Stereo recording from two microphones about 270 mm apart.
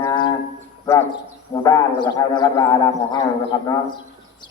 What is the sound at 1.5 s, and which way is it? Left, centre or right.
Speech, centre.